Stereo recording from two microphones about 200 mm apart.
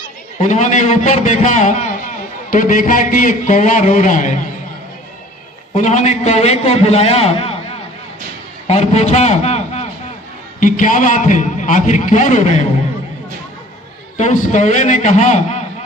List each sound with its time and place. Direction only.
0.3 s a man's voice: 35° left (ahead or behind)
5.7 s a man's voice: 35° left (ahead or behind)
8.6 s a man's voice: 30° left (ahead or behind)
14.2 s a man's voice: 35° left (ahead or behind)